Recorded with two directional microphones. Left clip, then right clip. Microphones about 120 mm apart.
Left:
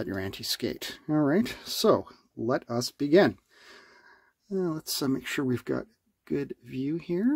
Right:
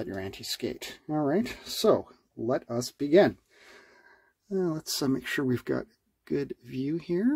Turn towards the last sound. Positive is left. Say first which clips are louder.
# even
turn(degrees=10)  # may be behind; listen again after turning